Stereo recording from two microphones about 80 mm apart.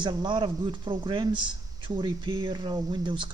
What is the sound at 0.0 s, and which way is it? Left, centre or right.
Speech, right.